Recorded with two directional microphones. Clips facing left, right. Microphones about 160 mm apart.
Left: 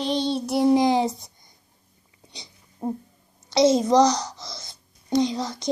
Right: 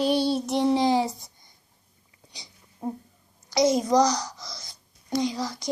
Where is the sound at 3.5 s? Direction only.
25° left (ahead or behind).